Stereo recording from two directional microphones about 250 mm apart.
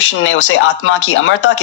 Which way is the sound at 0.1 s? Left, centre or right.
Left.